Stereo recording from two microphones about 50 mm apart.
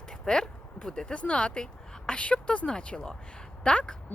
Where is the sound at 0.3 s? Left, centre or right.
Centre.